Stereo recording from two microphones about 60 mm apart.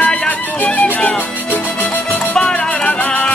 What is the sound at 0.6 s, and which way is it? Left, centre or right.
Music, left.